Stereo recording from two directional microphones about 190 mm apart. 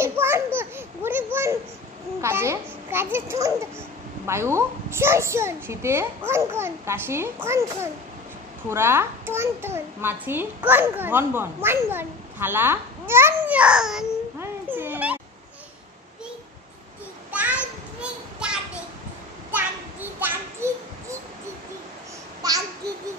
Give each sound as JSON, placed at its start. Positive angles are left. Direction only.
{"t": 0.0, "sound": "babbling", "side_deg": -15}
{"t": 2.2, "sound": "a child's voice", "side_deg": -15}
{"t": 14.4, "sound": "children playing", "side_deg": -10}
{"t": 17.3, "sound": "children playing", "side_deg": -10}
{"t": 18.4, "sound": "a sound", "side_deg": -5}
{"t": 19.5, "sound": "child singing", "side_deg": -10}
{"t": 22.4, "sound": "babbling", "side_deg": -20}